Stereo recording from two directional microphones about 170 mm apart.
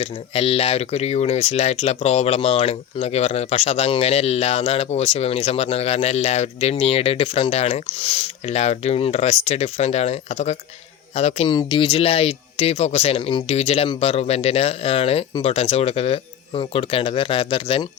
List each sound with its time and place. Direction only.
0.0 s speech: 35° left (ahead or behind)
11.5 s speech: 30° left (ahead or behind)